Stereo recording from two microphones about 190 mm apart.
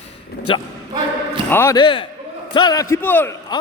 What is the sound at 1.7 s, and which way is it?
A man's voice, 25° left (ahead or behind).